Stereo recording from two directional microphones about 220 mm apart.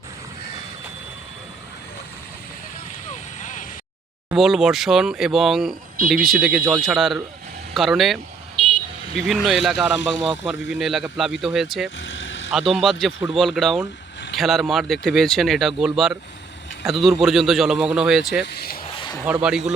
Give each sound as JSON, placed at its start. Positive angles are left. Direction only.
{"t": 3.1, "sound": "vehicle", "side_deg": 35}
{"t": 4.3, "sound": "speech", "side_deg": 0}
{"t": 11.9, "sound": "vehicle", "side_deg": 60}
{"t": 12.5, "sound": "speech", "side_deg": 0}
{"t": 18.4, "sound": "speech", "side_deg": 45}
{"t": 18.9, "sound": "a sound", "side_deg": 25}
{"t": 19.2, "sound": "speech", "side_deg": -5}